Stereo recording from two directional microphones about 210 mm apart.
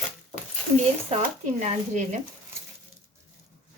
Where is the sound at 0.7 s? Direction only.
30° right (ahead or behind).